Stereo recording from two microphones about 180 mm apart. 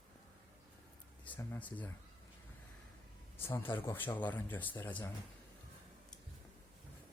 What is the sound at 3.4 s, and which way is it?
Speech, 15° left (ahead or behind).